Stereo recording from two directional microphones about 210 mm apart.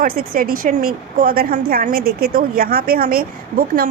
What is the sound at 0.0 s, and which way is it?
A woman's voice, 40° right (ahead or behind).